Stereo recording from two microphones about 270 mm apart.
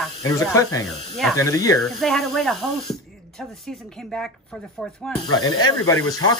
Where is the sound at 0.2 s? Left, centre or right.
Centre.